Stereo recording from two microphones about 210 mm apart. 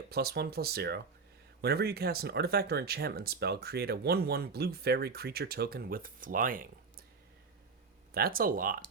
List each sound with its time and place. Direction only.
0.1 s speech: 50° right (ahead or behind)
8.1 s speech: 45° right (ahead or behind)